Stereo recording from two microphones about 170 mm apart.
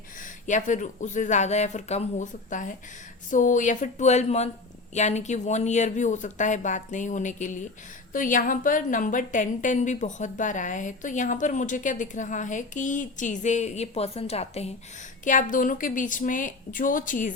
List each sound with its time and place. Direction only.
0.4 s a woman's voice: 45° left (ahead or behind)
15.2 s a woman's voice: 50° left (ahead or behind)